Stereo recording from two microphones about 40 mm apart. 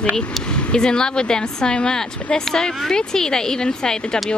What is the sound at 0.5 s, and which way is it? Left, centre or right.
A woman's voice, centre.